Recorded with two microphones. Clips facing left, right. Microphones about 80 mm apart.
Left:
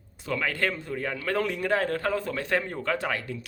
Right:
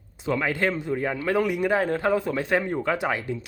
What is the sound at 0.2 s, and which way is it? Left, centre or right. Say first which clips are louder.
Speech: right 4 dB; right.